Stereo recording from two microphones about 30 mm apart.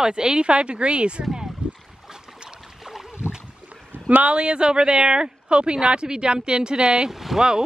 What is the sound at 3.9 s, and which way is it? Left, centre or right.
Rowboat, right.